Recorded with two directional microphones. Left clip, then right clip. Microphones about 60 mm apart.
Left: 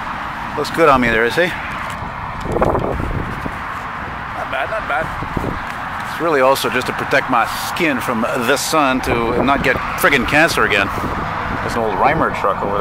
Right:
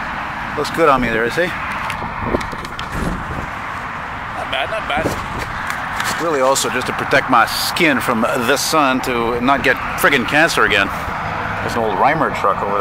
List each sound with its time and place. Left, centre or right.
0.7 s speech: left
6.2 s speech: left
6.5 s speech: left
7.2 s speech: right
8.2 s speech: centre